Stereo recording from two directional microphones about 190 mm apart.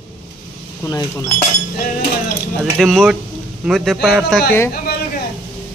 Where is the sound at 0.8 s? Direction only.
15° left (ahead or behind).